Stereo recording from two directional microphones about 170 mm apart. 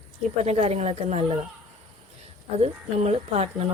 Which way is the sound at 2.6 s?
40° right (ahead or behind).